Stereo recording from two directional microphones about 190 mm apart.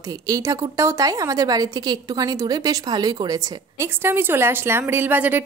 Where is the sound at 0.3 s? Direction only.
15° right (ahead or behind).